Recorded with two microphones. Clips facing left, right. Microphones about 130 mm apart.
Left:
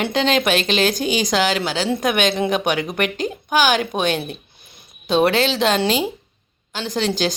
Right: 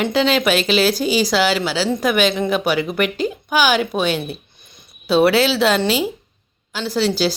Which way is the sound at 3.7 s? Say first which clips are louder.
Right 2 dB; 5° right (ahead or behind).